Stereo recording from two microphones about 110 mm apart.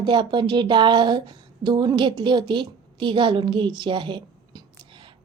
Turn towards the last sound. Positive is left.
turn(degrees=-45)  # may be behind; listen again after turning